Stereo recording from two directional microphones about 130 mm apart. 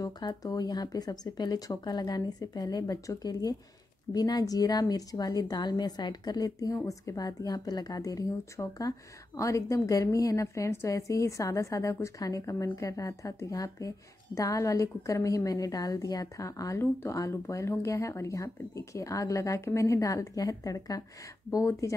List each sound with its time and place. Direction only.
0.0 s speech: 30° left (ahead or behind)